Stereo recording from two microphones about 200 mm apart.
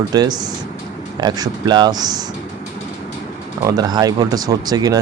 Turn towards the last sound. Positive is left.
turn(degrees=-20)  # may be behind; listen again after turning